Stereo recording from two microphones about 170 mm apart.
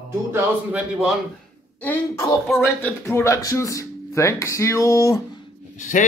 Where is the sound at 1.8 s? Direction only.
10° left (ahead or behind).